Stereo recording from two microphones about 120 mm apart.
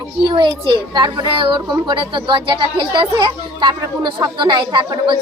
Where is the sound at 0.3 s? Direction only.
45° right (ahead or behind).